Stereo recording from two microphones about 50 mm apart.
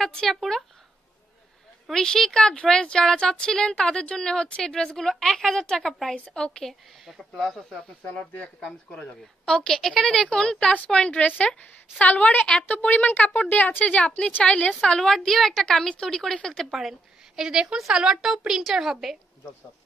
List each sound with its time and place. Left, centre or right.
0.0 s a woman's voice: centre
2.0 s speech: centre
6.1 s speech: left
6.6 s a woman's voice: centre
8.1 s speech: left
9.7 s speech: centre; by 14.7 s left
14.7 s a woman's voice: centre
17.4 s a woman's voice: centre